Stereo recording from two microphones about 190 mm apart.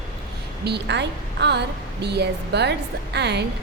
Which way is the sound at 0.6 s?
65° right (ahead or behind).